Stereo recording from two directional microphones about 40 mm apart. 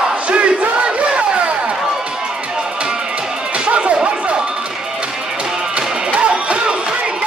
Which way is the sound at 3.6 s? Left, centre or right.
Right.